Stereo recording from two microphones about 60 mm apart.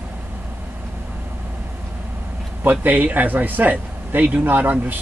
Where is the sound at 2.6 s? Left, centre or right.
Right.